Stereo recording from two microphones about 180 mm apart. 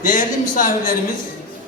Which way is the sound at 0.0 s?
50° left (ahead or behind).